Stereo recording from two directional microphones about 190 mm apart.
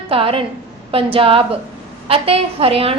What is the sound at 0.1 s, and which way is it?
A woman's voice, 30° right (ahead or behind).